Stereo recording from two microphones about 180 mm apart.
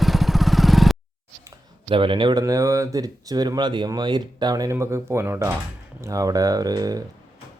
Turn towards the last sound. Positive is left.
turn(degrees=-20)  # may be behind; listen again after turning